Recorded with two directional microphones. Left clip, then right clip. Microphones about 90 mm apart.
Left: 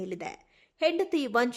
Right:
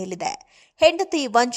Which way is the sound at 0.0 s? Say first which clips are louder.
Right 9 dB; 35° right (ahead or behind).